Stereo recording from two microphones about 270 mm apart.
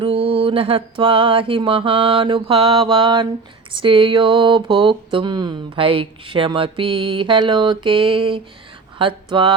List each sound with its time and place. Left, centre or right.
0.0 s speech: right